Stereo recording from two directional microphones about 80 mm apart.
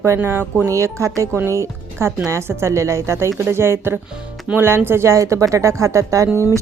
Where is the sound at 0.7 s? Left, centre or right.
Right.